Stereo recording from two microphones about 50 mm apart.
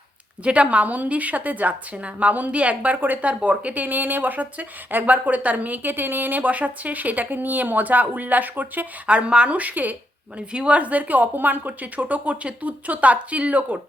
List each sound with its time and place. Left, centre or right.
0.4 s a woman's voice: right
9.0 s speech: right
9.6 s a woman's voice: right
10.5 s speech: right